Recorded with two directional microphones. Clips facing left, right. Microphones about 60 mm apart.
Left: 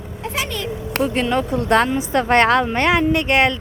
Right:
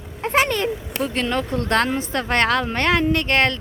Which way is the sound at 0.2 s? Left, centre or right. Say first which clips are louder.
Right 6 dB; right.